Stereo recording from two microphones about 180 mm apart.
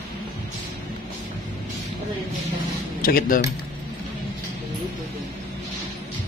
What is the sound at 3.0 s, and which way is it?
Speech, 55° left (ahead or behind).